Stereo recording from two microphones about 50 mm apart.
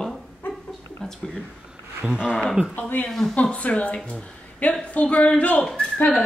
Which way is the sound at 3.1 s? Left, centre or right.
Centre.